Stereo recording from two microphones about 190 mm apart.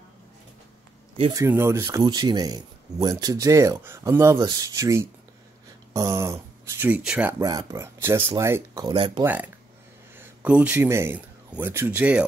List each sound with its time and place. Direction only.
1.3 s speech: 15° right (ahead or behind)
9.2 s speech: 10° right (ahead or behind)